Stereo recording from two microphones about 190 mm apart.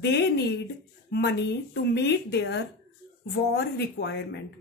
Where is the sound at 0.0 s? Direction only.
65° left (ahead or behind).